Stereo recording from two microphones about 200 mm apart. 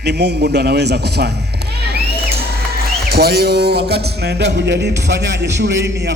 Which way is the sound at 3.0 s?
55° right (ahead or behind).